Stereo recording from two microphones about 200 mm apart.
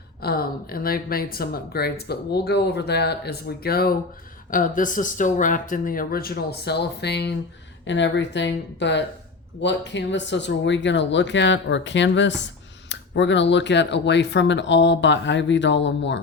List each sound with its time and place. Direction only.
0.2 s speech: 50° left (ahead or behind)